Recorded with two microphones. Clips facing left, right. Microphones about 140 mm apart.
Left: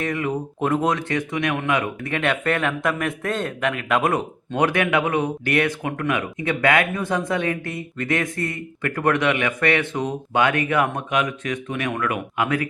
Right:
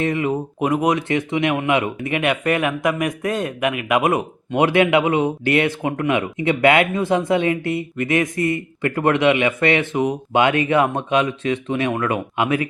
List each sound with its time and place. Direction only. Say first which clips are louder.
0.0 s speech: right 4 dB; 20° right (ahead or behind)